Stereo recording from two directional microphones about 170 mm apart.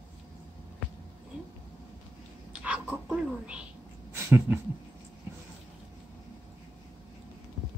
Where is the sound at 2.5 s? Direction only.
5° right (ahead or behind).